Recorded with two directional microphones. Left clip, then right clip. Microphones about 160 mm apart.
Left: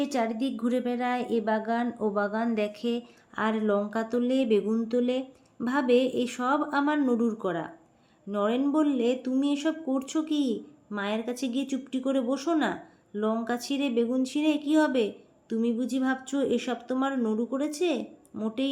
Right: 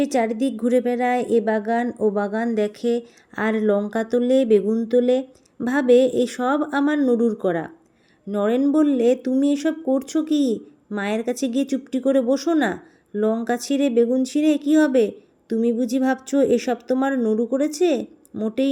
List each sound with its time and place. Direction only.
0.0 s a woman's voice: 40° right (ahead or behind)